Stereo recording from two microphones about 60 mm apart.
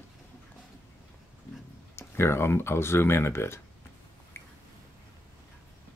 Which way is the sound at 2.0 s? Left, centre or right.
Left.